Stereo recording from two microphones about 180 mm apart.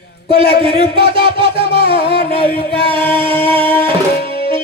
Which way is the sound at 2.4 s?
60° left (ahead or behind).